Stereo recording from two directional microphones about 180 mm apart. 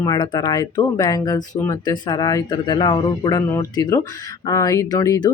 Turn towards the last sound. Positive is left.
turn(degrees=20)  # may be behind; listen again after turning